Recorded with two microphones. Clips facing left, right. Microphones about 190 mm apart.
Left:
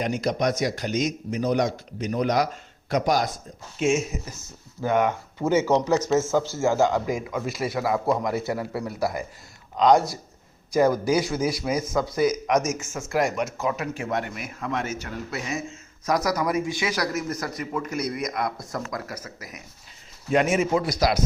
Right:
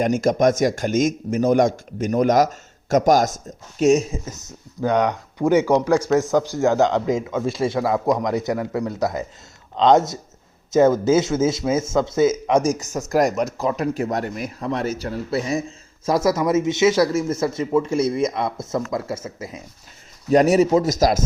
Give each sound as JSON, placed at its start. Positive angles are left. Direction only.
{"t": 0.0, "sound": "a man's voice", "side_deg": -45}
{"t": 4.9, "sound": "a man's voice", "side_deg": -20}
{"t": 20.3, "sound": "speech", "side_deg": -40}